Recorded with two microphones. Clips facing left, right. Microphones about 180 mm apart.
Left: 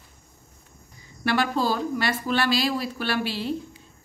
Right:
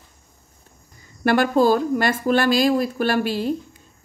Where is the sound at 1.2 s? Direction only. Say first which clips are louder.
Right 7 dB; 50° right (ahead or behind).